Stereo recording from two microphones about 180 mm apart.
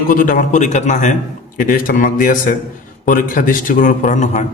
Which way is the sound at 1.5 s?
50° left (ahead or behind).